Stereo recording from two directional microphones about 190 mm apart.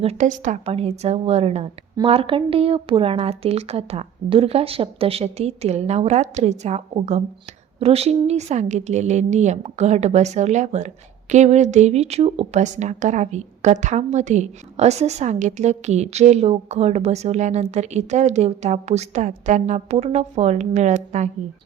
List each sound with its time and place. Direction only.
0.0 s a woman's voice: 35° right (ahead or behind)